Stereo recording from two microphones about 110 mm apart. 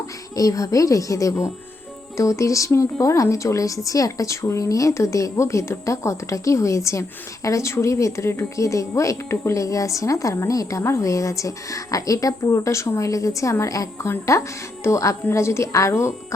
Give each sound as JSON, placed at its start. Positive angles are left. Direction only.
{"t": 0.3, "sound": "speech", "side_deg": 30}